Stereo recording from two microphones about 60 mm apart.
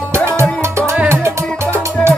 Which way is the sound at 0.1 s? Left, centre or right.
Right.